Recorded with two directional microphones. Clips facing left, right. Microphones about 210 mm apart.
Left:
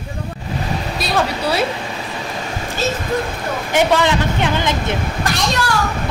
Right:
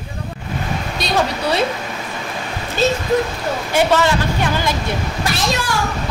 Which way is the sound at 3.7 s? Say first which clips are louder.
Left 1 dB; 20° left (ahead or behind).